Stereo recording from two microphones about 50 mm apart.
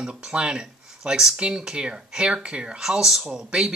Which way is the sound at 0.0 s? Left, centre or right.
Centre.